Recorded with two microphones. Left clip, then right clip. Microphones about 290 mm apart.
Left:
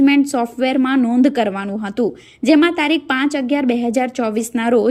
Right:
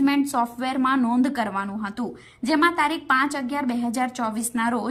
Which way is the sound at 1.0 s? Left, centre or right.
Right.